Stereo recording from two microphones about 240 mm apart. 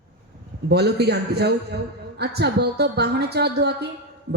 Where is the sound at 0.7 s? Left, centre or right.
Right.